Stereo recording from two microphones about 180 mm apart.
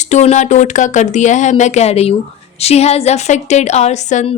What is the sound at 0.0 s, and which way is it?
Speech, 40° left (ahead or behind).